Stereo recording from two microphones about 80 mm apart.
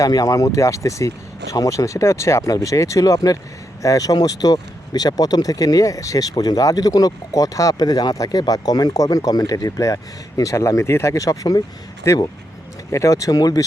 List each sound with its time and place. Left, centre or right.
0.0 s speech: left